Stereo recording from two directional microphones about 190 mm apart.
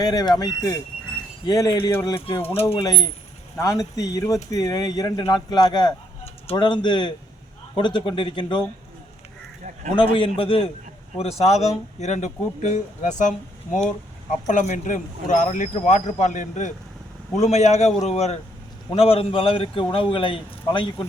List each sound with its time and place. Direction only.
0.0 s speech: 20° left (ahead or behind)
9.9 s speech: 25° left (ahead or behind)